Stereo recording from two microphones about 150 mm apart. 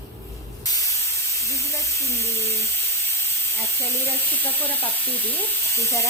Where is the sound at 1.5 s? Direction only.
20° left (ahead or behind).